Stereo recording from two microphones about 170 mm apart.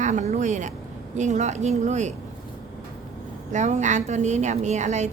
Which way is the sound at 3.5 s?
45° right (ahead or behind).